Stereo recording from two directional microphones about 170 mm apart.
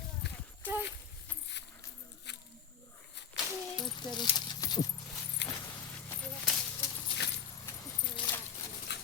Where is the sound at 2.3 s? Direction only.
90° left.